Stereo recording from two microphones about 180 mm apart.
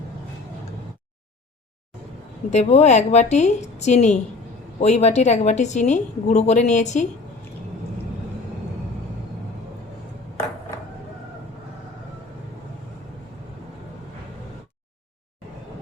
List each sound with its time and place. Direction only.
2.5 s a woman's voice: 40° left (ahead or behind)